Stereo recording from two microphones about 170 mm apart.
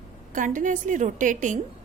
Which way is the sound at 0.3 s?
50° right (ahead or behind).